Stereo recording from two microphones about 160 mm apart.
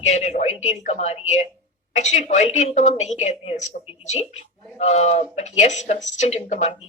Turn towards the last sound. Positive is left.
turn(degrees=45)  # may be behind; listen again after turning